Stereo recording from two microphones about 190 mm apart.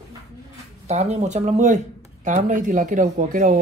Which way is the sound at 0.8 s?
35° right (ahead or behind).